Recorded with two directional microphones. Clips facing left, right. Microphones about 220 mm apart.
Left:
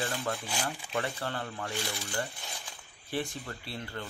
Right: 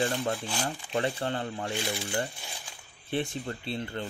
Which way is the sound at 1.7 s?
15° right (ahead or behind).